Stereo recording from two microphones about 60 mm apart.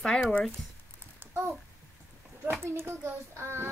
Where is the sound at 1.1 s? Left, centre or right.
Right.